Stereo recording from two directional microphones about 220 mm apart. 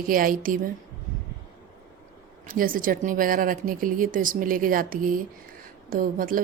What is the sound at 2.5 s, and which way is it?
Speech, 40° right (ahead or behind).